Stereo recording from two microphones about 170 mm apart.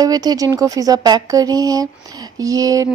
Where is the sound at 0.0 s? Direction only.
25° right (ahead or behind).